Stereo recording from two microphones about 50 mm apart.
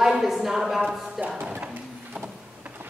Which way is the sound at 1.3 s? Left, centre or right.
Right.